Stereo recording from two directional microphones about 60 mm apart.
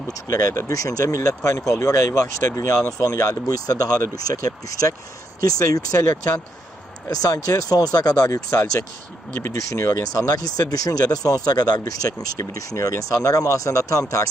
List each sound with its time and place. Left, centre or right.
0.1 s speech: left
1.4 s speech: left
7.1 s speech: left